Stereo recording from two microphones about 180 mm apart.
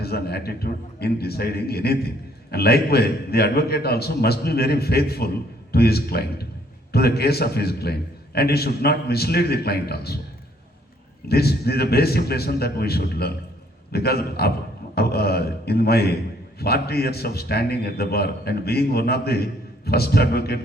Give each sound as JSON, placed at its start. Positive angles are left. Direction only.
{"t": 0.0, "sound": "a man's voice", "side_deg": 60}
{"t": 11.3, "sound": "a man's voice", "side_deg": 60}